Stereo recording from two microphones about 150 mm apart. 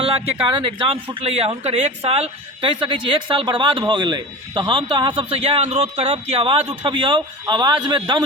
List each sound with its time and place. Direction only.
0.0 s speech: 40° right (ahead or behind)